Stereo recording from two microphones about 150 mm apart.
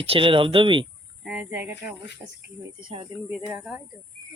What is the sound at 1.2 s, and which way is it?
Speech, 10° right (ahead or behind).